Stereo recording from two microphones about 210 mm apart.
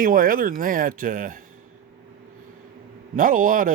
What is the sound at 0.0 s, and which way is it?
Speech, 40° right (ahead or behind).